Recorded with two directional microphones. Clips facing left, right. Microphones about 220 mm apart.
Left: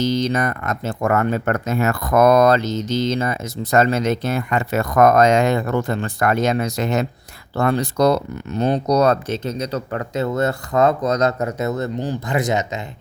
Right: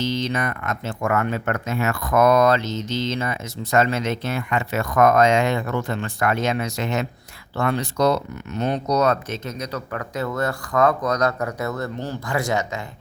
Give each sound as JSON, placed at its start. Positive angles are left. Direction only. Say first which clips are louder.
{"t": 0.0, "sound": "speech", "louder": "left 5 dB", "side_deg": 40}